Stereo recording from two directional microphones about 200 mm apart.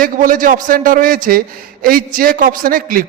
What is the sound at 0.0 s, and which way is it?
A man's voice, 45° right (ahead or behind).